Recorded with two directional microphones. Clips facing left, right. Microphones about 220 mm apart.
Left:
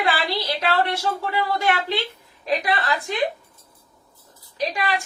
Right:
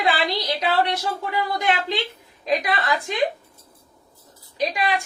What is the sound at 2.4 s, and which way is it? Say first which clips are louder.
Speech: even; 15° right (ahead or behind).